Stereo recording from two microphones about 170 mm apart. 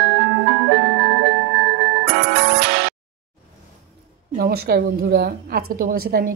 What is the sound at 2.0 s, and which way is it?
Music, 70° right (ahead or behind).